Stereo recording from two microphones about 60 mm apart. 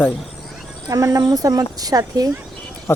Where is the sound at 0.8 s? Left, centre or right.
Right.